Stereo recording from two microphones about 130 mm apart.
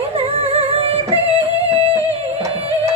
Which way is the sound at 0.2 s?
50° right (ahead or behind).